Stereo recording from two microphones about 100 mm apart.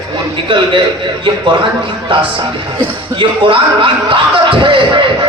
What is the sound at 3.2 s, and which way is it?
A man's voice, 60° right (ahead or behind).